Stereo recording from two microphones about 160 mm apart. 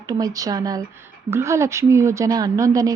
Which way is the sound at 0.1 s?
20° right (ahead or behind).